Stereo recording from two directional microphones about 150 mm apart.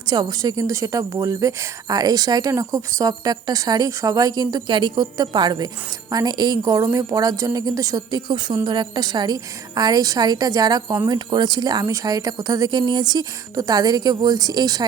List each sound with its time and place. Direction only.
0.1 s a woman's voice: 25° right (ahead or behind)